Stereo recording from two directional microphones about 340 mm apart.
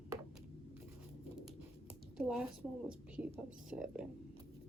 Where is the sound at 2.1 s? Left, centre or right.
Centre.